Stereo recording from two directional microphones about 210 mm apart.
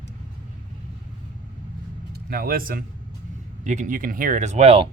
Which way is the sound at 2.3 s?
45° right (ahead or behind).